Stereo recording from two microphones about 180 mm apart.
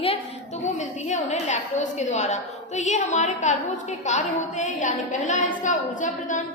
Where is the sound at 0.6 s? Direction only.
40° left (ahead or behind).